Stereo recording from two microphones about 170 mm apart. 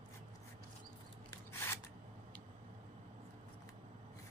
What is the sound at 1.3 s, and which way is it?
Scissors, 15° left (ahead or behind).